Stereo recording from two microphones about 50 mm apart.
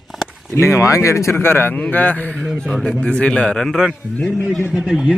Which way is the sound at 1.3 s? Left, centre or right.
Left.